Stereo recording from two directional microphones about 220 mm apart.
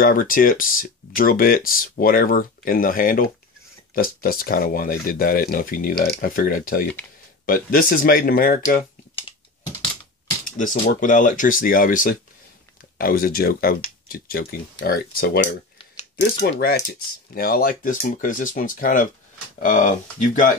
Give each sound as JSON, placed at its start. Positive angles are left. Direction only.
{"t": 0.0, "sound": "speech", "side_deg": 40}
{"t": 10.4, "sound": "speech", "side_deg": 35}
{"t": 16.0, "sound": "a sound", "side_deg": 30}
{"t": 16.4, "sound": "speech", "side_deg": 50}